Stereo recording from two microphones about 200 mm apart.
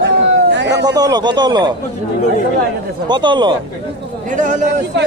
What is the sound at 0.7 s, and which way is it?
A man's voice, 20° right (ahead or behind).